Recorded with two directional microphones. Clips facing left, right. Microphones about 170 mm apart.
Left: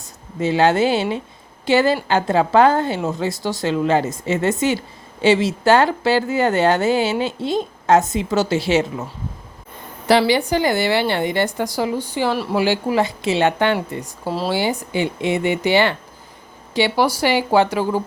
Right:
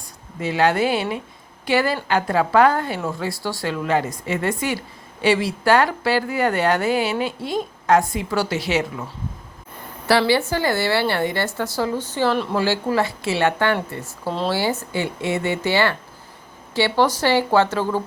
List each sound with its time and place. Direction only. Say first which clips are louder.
0.0 s a woman's voice: left 5 dB; 25° left (ahead or behind)
10.1 s a woman's voice: left 2 dB; 20° left (ahead or behind)
14.3 s speech: left 1 dB; 5° left (ahead or behind)
14.5 s a woman's voice: left 2 dB; 15° left (ahead or behind)